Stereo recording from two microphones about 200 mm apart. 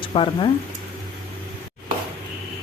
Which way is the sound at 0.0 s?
25° left (ahead or behind).